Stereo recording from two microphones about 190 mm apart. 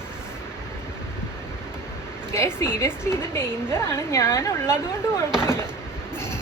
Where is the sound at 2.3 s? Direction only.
15° left (ahead or behind).